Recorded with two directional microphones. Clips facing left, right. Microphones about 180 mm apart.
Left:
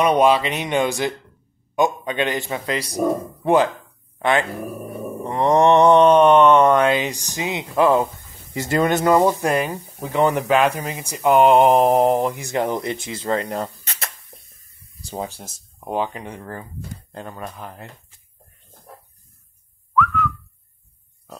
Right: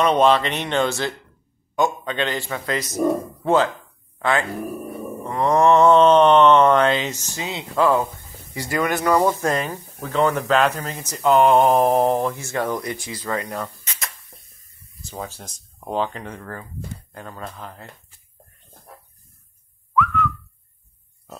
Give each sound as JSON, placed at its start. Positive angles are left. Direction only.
{"t": 0.0, "sound": "speech", "side_deg": 10}
{"t": 15.0, "sound": "a sound", "side_deg": 35}
{"t": 15.2, "sound": "speech", "side_deg": 10}
{"t": 20.0, "sound": "whistling", "side_deg": 0}